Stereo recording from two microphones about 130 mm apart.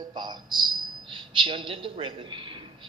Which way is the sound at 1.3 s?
40° right (ahead or behind).